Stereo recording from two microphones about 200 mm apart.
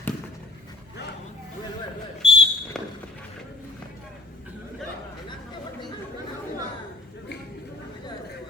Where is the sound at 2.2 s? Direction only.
25° left (ahead or behind).